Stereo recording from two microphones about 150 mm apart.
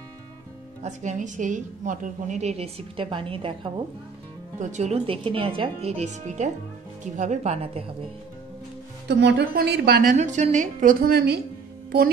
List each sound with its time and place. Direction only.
0.8 s a woman's voice: 55° right (ahead or behind); by 3.7 s 35° right (ahead or behind)
4.6 s a woman's voice: 55° right (ahead or behind)
9.0 s a woman's voice: 90° right
10.1 s a woman's voice: 50° right (ahead or behind); by 11.4 s 90° right